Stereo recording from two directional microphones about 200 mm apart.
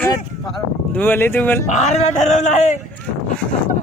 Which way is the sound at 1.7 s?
35° left (ahead or behind).